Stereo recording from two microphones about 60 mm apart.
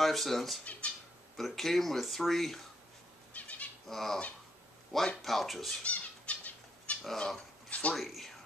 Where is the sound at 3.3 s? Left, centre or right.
Left.